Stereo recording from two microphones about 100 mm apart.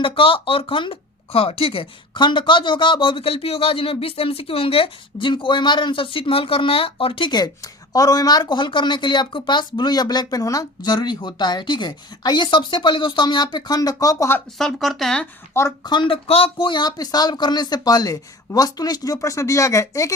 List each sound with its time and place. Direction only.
0.0 s speech: 60° left (ahead or behind)
7.3 s speech: 45° left (ahead or behind)
14.6 s speech: centre (ahead or behind)
15.8 s speech: 50° left (ahead or behind); by 20.1 s 30° left (ahead or behind)